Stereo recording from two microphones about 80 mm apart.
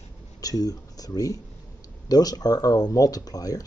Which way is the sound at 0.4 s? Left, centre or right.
Left.